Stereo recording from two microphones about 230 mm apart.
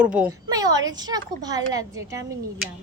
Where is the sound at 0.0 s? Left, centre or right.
Centre.